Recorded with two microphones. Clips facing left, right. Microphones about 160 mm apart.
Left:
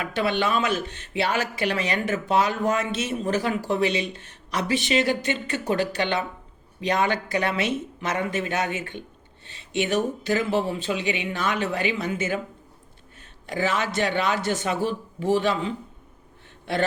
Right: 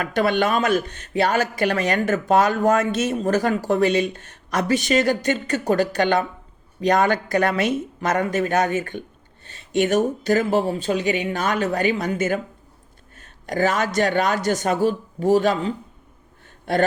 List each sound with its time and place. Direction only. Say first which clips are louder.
0.0 s speech: right 4 dB; 45° right (ahead or behind)